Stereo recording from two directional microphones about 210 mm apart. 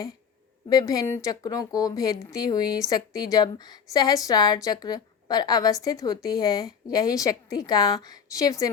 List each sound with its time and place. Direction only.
0.7 s a woman's voice: 20° left (ahead or behind)